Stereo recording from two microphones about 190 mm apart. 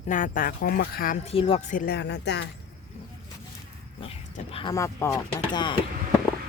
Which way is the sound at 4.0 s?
30° left (ahead or behind).